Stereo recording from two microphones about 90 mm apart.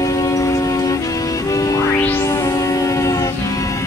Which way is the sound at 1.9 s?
20° left (ahead or behind).